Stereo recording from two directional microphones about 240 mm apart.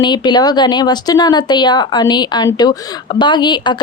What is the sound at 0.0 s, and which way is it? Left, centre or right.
Speech, centre.